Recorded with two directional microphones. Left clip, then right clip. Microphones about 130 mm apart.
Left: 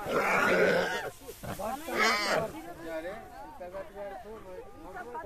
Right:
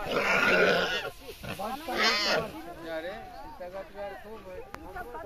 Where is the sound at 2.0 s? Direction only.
50° left (ahead or behind).